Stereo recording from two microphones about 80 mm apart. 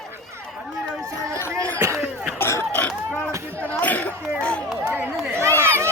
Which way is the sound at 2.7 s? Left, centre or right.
Centre.